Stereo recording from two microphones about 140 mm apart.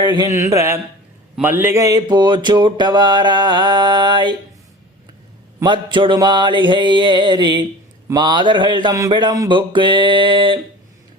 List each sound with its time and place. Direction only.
0.0 s mantra: 30° right (ahead or behind)
0.3 s speech: 20° right (ahead or behind)
1.4 s mantra: 15° right (ahead or behind); by 4.4 s 35° right (ahead or behind)
5.6 s mantra: 35° right (ahead or behind)
9.0 s speech: 30° right (ahead or behind)
9.5 s mantra: 35° right (ahead or behind)